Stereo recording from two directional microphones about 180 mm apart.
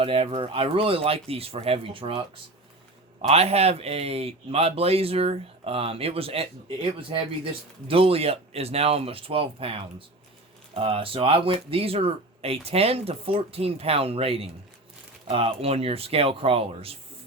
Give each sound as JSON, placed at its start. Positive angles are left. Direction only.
{"t": 0.0, "sound": "speech", "side_deg": -35}
{"t": 7.9, "sound": "speech", "side_deg": -30}